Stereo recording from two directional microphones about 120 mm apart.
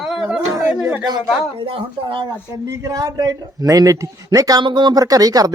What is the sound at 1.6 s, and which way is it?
Speech, 45° right (ahead or behind).